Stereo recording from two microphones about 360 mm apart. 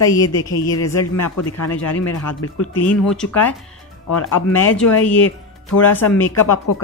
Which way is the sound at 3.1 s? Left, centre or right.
Centre.